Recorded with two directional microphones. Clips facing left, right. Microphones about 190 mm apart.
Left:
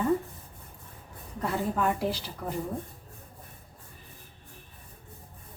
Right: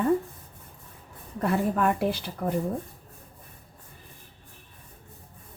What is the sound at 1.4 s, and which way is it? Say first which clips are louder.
A woman's voice: right 4 dB; 55° right (ahead or behind).